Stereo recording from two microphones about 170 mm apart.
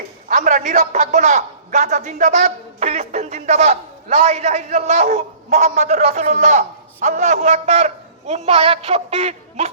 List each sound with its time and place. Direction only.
0.3 s a man's voice: 45° right (ahead or behind)